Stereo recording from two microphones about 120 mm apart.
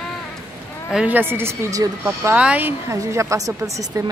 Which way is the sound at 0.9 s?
15° right (ahead or behind).